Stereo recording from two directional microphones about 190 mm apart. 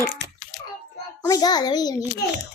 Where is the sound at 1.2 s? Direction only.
20° left (ahead or behind).